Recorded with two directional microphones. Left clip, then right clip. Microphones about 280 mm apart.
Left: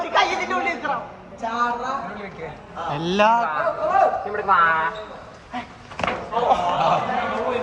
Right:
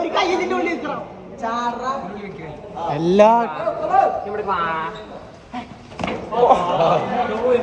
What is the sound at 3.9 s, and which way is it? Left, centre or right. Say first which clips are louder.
Speech: right 3 dB; centre.